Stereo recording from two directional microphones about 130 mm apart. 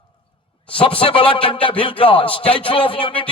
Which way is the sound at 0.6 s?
40° left (ahead or behind).